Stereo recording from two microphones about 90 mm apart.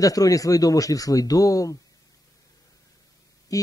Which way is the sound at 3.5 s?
40° left (ahead or behind).